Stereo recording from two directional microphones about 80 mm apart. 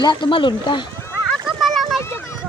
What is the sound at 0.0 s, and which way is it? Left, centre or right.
Speech, left.